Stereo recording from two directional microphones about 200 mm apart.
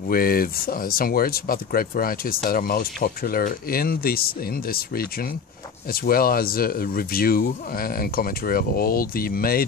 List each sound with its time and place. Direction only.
0.1 s speech: 45° left (ahead or behind)